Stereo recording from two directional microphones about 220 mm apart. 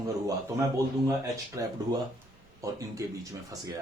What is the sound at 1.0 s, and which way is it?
A man's voice, 15° right (ahead or behind).